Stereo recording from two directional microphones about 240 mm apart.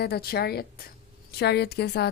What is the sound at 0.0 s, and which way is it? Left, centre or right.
A woman's voice, left.